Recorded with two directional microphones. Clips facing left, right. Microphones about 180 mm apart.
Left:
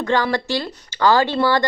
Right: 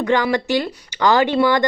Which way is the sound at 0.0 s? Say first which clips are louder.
Right 2 dB; 15° right (ahead or behind).